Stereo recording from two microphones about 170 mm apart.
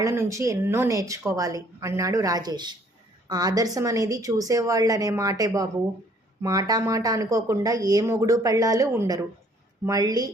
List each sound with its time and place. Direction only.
0.0 s speech: 15° right (ahead or behind)